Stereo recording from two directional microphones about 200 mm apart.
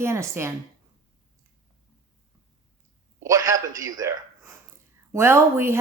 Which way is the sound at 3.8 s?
15° right (ahead or behind).